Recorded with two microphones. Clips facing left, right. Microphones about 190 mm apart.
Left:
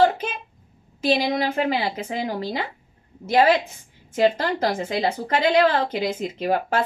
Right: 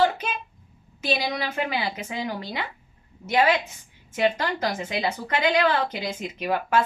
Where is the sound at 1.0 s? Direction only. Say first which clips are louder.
Left 6 dB; 30° left (ahead or behind).